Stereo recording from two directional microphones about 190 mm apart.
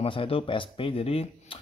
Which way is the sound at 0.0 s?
30° left (ahead or behind).